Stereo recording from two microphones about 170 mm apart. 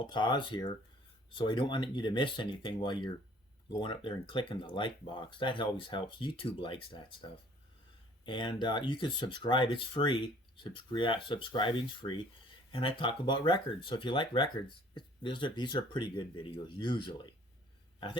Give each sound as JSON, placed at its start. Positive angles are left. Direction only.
{"t": 0.0, "sound": "speech", "side_deg": 25}